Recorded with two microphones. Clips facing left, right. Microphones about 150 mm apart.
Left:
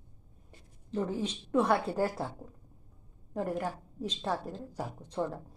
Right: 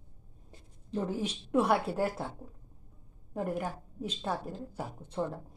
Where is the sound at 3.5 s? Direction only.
5° right (ahead or behind).